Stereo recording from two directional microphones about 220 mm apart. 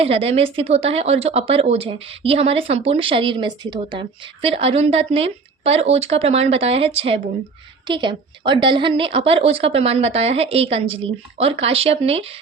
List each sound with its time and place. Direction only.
0.0 s speech: 25° right (ahead or behind)